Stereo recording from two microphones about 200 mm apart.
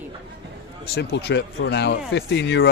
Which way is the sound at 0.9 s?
55° left (ahead or behind).